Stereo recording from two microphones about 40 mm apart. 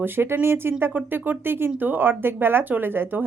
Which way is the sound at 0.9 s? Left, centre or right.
Right.